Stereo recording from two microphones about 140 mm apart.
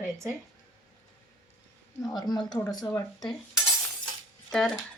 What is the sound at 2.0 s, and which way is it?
Speech, 30° left (ahead or behind).